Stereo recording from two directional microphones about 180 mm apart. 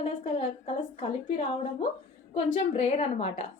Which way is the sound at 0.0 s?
35° left (ahead or behind).